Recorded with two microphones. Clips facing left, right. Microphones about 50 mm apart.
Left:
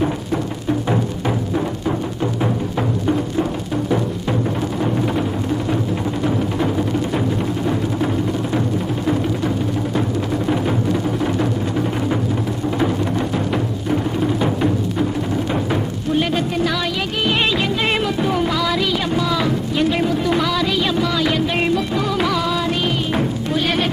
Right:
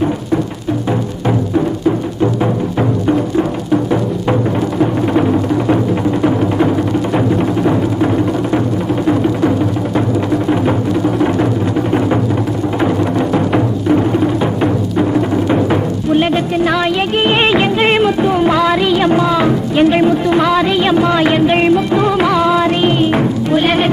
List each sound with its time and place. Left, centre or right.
12.8 s music: right
15.7 s music: right
17.2 s music: right
17.8 s music: right
18.2 s music: centre
18.4 s music: right
20.0 s a sound: right
20.5 s music: right